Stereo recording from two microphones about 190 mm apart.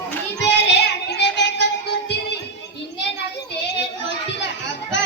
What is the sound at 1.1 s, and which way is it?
Music, 65° left (ahead or behind).